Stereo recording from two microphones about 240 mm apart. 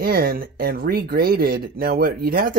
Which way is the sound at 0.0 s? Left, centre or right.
Right.